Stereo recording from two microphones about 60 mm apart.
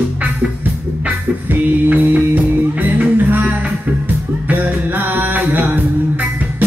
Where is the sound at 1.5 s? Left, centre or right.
Right.